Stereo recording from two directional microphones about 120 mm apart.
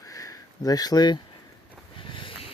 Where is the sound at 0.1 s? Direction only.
30° left (ahead or behind).